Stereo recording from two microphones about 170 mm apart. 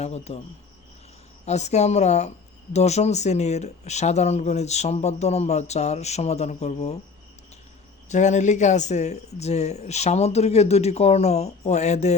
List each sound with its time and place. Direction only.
0.0 s speech: 40° left (ahead or behind)
1.5 s speech: 40° left (ahead or behind)
8.1 s speech: 45° left (ahead or behind)